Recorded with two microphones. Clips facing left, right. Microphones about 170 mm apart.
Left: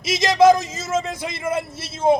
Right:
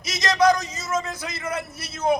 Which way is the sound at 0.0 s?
25° left (ahead or behind).